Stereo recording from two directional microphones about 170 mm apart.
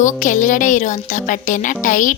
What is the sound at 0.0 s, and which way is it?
A woman's voice, 50° left (ahead or behind).